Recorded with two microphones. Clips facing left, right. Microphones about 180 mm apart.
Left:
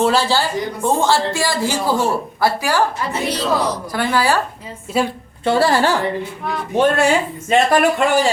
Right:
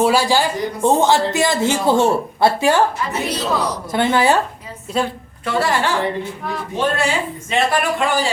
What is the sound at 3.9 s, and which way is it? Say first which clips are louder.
Speech: right 3 dB; 20° right (ahead or behind).